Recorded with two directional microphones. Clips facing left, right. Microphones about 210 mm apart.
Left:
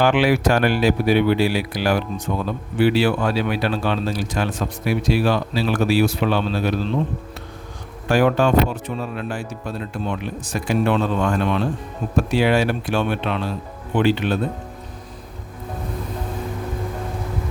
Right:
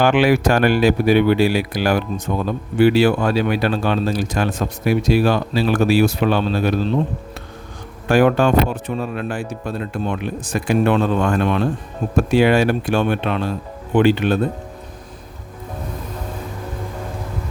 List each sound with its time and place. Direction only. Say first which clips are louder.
0.0 s speech: right 2 dB; 45° right (ahead or behind)
8.0 s speech: right 3 dB; 55° right (ahead or behind)